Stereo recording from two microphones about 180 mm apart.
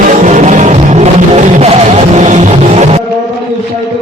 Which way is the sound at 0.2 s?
45° right (ahead or behind).